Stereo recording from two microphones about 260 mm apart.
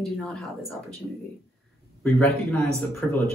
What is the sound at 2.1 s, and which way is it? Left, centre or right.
Speech, centre.